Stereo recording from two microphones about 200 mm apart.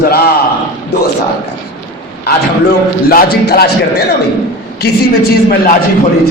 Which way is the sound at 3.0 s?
50° left (ahead or behind).